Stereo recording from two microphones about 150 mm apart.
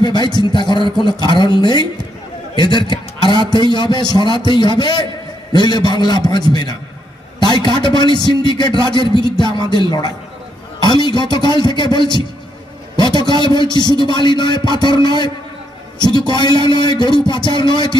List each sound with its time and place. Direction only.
0.0 s a man's voice: 30° left (ahead or behind)